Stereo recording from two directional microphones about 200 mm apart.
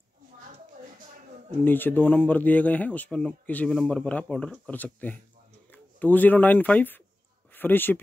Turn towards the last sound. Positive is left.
turn(degrees=10)  # may be behind; listen again after turning